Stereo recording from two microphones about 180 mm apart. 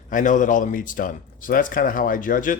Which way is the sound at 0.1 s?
45° left (ahead or behind).